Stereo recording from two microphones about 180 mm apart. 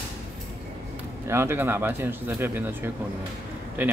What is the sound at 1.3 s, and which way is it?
Speech, 15° right (ahead or behind).